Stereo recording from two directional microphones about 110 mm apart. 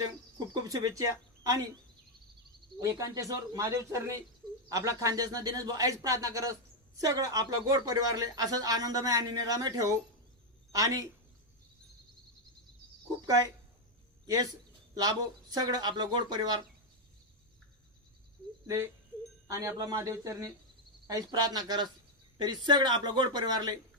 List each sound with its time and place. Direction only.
0.3 s speech: 35° right (ahead or behind)
2.8 s speech: 30° right (ahead or behind)
13.2 s speech: 30° right (ahead or behind)
15.5 s speech: 35° right (ahead or behind)
19.5 s speech: 30° right (ahead or behind)